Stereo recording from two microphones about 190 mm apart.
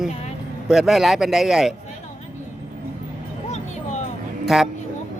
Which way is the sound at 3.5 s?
35° left (ahead or behind).